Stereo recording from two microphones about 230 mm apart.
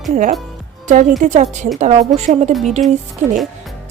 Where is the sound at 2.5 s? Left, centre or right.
Centre.